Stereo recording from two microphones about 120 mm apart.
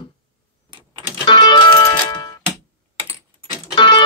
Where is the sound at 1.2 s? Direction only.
40° left (ahead or behind).